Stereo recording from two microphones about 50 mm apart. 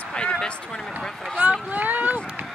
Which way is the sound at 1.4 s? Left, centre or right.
Right.